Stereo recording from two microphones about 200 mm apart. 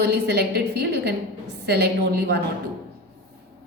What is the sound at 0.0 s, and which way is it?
A woman's voice, 55° right (ahead or behind).